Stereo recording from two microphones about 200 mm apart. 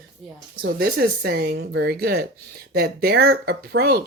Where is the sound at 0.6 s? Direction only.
50° right (ahead or behind).